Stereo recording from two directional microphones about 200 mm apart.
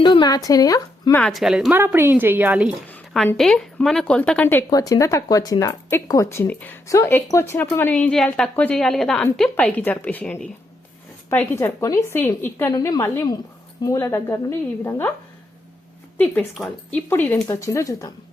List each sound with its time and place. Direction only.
0.0 s speech: 25° left (ahead or behind)
1.2 s a woman's voice: centre (ahead or behind)
2.9 s a sound: centre (ahead or behind)
3.2 s speech: centre (ahead or behind)
16.1 s speech: 5° left (ahead or behind)